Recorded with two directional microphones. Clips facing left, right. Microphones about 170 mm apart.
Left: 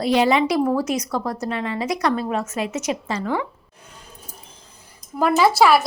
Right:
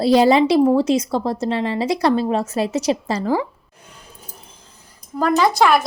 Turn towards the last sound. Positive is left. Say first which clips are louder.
# even
turn(degrees=5)  # may be behind; listen again after turning